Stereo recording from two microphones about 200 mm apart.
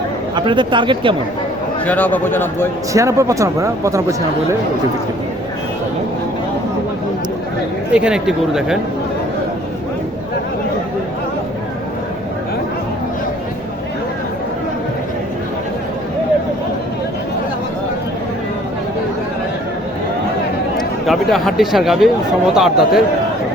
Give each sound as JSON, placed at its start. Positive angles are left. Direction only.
{"t": 0.3, "sound": "speech", "side_deg": -25}
{"t": 1.8, "sound": "a man's voice", "side_deg": 10}
{"t": 2.9, "sound": "speech", "side_deg": -15}
{"t": 7.9, "sound": "speech", "side_deg": -5}
{"t": 20.7, "sound": "speech", "side_deg": 0}